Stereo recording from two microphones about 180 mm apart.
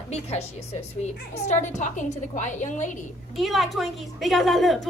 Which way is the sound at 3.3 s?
Centre (ahead or behind).